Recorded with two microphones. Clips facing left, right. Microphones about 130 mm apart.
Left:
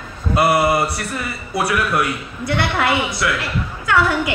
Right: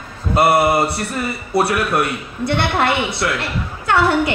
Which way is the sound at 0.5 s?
25° right (ahead or behind).